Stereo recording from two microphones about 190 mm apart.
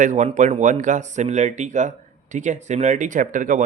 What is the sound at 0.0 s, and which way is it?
Speech, 40° right (ahead or behind).